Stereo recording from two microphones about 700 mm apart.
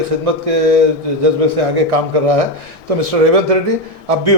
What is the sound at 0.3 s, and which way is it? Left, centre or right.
A man's voice, right.